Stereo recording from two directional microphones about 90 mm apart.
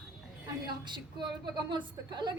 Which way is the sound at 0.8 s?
55° right (ahead or behind).